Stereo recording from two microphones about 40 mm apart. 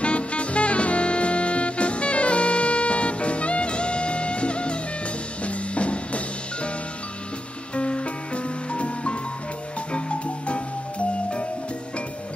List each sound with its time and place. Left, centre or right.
0.0 s music: left
7.7 s music: left